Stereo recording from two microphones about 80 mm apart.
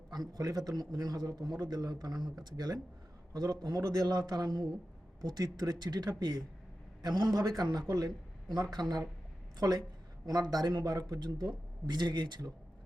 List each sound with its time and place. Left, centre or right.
0.1 s speech: right